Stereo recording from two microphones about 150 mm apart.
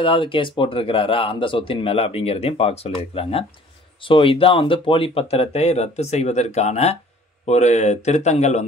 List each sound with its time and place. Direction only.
0.0 s speech: 35° left (ahead or behind)